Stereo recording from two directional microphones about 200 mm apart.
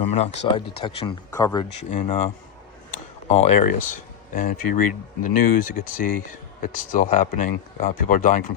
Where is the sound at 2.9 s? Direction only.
35° left (ahead or behind).